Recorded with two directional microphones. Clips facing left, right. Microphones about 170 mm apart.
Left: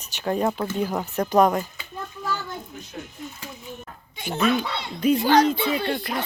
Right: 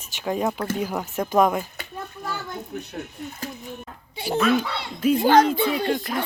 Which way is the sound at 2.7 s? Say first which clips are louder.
Right 5 dB; 60° right (ahead or behind).